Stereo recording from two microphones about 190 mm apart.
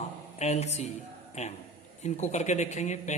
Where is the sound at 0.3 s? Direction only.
35° left (ahead or behind).